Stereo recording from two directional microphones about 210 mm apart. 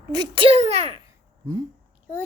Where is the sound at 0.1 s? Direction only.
20° right (ahead or behind).